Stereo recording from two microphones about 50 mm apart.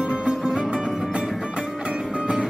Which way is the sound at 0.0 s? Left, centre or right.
Right.